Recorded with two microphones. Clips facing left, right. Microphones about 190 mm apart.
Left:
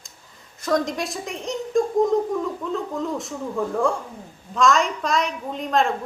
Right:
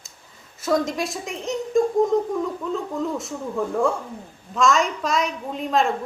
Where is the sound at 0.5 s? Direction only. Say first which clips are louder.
Right 1 dB; 5° right (ahead or behind).